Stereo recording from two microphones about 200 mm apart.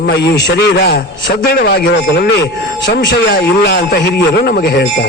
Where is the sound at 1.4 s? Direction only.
50° left (ahead or behind).